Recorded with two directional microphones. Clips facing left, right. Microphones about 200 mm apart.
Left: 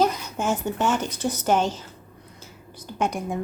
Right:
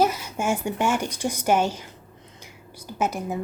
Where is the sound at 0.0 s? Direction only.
10° right (ahead or behind).